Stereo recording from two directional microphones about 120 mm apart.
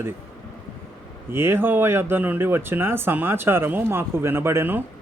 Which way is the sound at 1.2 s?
20° right (ahead or behind).